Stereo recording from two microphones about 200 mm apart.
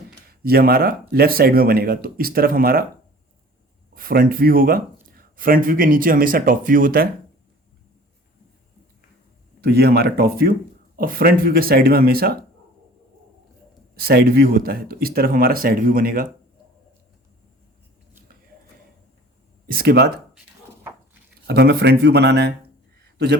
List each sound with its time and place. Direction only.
0.3 s speech: 50° right (ahead or behind)
3.9 s speech: 45° right (ahead or behind)
9.6 s speech: 50° right (ahead or behind)
13.9 s speech: 50° right (ahead or behind)
19.6 s speech: 50° right (ahead or behind)
21.4 s a man's voice: 55° right (ahead or behind)